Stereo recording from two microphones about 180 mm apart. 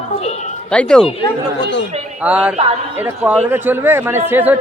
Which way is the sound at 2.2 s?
5° right (ahead or behind).